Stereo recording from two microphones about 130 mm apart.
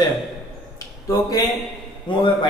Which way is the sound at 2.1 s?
40° left (ahead or behind).